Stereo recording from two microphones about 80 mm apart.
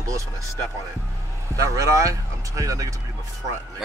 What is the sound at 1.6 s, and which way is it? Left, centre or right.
Speech, right.